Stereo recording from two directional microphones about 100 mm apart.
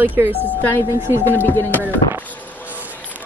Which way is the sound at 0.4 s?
20° left (ahead or behind).